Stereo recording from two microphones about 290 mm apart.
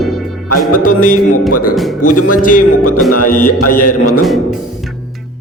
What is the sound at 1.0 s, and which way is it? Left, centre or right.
Speech, left.